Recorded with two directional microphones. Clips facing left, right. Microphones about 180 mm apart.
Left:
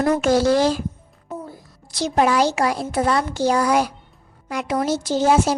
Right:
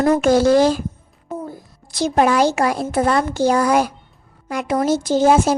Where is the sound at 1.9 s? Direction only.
50° right (ahead or behind).